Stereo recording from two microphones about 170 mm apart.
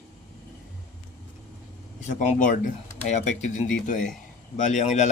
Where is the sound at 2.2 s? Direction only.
45° left (ahead or behind).